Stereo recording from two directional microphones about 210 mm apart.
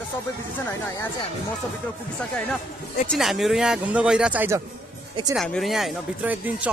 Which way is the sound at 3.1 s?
Centre (ahead or behind).